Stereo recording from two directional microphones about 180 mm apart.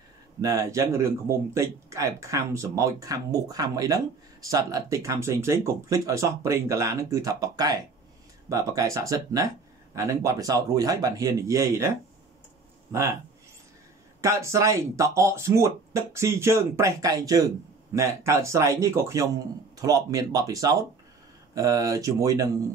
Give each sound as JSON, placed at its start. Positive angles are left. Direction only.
{"t": 0.4, "sound": "speech", "side_deg": -20}
{"t": 14.2, "sound": "speech", "side_deg": -15}